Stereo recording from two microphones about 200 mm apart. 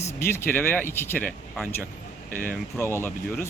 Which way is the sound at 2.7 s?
10° left (ahead or behind).